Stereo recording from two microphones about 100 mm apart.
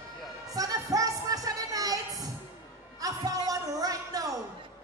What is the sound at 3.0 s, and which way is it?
Speech, 35° right (ahead or behind).